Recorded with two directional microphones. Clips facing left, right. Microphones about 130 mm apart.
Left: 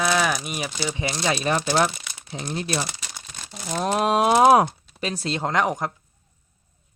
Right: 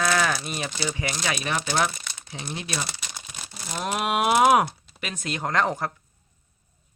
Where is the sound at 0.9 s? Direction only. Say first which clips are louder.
Left 6 dB; 25° left (ahead or behind).